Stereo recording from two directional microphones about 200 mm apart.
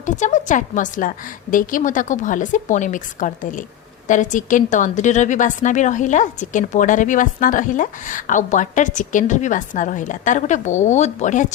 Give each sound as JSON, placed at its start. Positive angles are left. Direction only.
{"t": 0.0, "sound": "a woman's voice", "side_deg": 40}